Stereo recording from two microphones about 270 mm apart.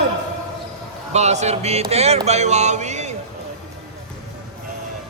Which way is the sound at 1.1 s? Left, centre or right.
Right.